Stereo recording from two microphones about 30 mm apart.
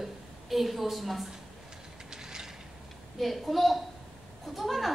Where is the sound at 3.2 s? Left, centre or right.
Centre.